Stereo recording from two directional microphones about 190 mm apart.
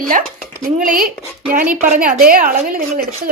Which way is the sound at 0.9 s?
45° right (ahead or behind).